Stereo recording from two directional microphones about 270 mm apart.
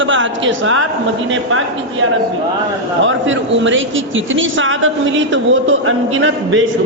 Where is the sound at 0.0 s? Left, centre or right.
Right.